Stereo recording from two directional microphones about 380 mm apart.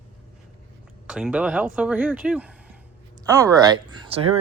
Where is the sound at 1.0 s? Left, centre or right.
Centre.